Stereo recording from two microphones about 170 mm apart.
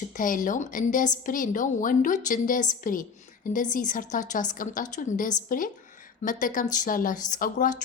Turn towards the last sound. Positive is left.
turn(degrees=50)  # may be behind; listen again after turning